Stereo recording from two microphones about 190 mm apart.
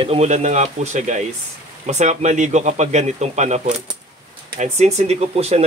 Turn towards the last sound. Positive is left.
turn(degrees=-35)  # may be behind; listen again after turning